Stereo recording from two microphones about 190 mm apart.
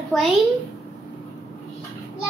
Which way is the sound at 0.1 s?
5° left (ahead or behind).